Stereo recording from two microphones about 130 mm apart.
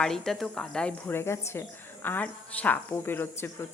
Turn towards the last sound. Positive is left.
turn(degrees=15)  # may be behind; listen again after turning